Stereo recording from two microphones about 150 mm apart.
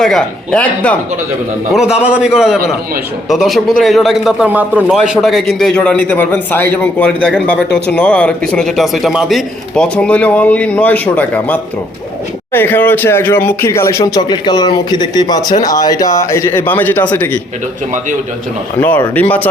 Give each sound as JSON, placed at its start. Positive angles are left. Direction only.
{"t": 0.0, "sound": "speech", "side_deg": 5}
{"t": 1.7, "sound": "a man's voice", "side_deg": -5}
{"t": 18.8, "sound": "speech", "side_deg": 10}